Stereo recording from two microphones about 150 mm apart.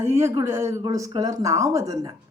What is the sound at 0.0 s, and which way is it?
A man's voice, 15° right (ahead or behind).